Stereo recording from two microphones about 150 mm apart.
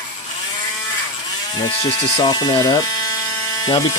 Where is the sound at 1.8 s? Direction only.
30° left (ahead or behind).